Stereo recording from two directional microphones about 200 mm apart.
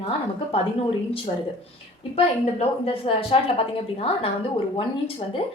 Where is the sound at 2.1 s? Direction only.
30° left (ahead or behind).